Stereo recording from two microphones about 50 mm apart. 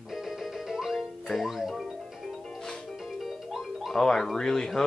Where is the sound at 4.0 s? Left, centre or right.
Centre.